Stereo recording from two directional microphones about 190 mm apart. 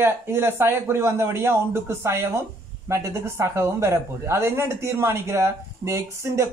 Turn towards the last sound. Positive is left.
turn(degrees=-15)  # may be behind; listen again after turning